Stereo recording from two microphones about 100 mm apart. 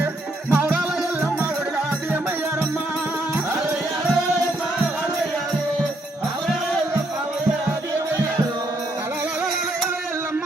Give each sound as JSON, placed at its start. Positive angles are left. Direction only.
{"t": 0.5, "sound": "music", "side_deg": -20}